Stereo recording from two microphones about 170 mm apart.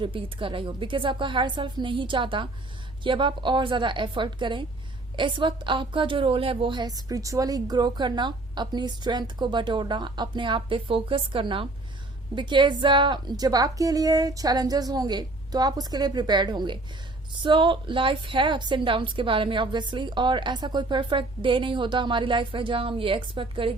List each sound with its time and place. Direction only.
0.0 s a woman's voice: 30° right (ahead or behind)